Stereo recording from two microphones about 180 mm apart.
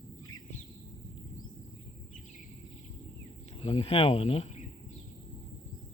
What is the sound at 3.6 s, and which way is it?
Speech, 35° left (ahead or behind).